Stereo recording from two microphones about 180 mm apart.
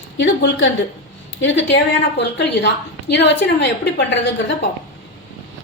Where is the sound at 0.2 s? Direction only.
80° left.